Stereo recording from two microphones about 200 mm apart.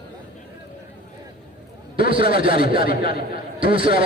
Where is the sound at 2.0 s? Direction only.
45° left (ahead or behind).